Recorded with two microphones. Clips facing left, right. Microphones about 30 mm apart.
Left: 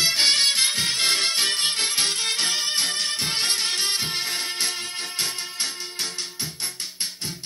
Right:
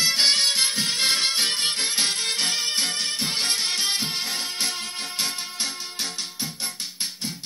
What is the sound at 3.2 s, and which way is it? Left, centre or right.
Music, left.